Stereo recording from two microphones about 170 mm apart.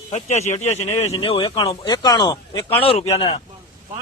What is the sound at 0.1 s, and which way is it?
Speech, 40° left (ahead or behind).